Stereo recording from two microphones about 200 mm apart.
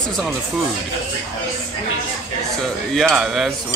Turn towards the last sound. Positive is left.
turn(degrees=0)  # may be behind; listen again after turning